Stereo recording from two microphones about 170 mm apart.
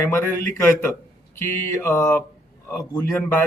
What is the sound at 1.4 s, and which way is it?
Speech, 15° left (ahead or behind).